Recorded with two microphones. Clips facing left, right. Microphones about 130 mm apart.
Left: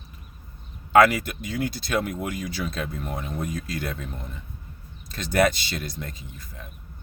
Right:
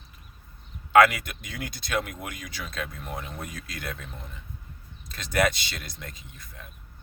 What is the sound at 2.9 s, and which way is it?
Speech, 50° left (ahead or behind).